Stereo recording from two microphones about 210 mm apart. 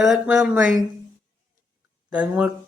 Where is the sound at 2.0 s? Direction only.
5° right (ahead or behind).